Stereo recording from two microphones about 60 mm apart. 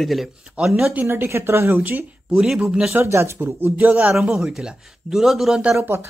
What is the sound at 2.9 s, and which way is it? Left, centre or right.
Speech, right.